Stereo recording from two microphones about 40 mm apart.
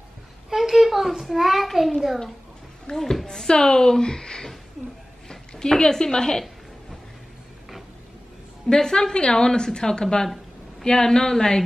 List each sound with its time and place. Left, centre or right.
0.5 s a child's voice: centre
3.0 s a woman's voice: centre
8.6 s a woman's voice: centre